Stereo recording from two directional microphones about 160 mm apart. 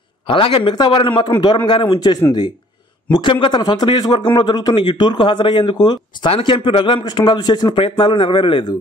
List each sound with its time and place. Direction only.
0.3 s a man's voice: 30° left (ahead or behind)